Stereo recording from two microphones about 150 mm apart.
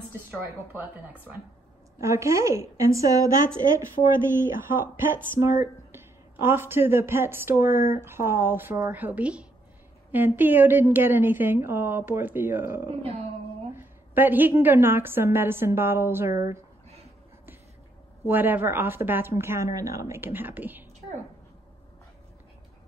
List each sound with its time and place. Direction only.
2.0 s a woman's voice: 20° right (ahead or behind)
4.0 s speech: 55° left (ahead or behind)
4.3 s speech: 15° right (ahead or behind)
18.3 s speech: 15° right (ahead or behind)